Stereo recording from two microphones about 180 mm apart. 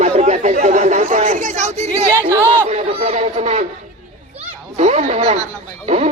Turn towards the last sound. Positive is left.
turn(degrees=-35)  # may be behind; listen again after turning